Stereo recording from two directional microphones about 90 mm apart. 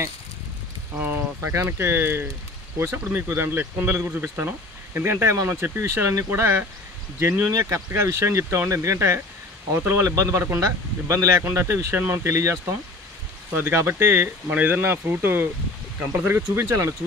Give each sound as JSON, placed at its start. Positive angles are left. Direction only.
{"t": 0.9, "sound": "speech", "side_deg": -20}